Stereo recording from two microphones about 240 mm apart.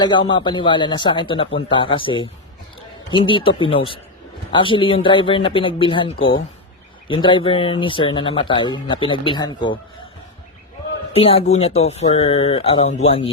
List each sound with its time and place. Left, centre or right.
0.0 s speech: centre
11.1 s speech: left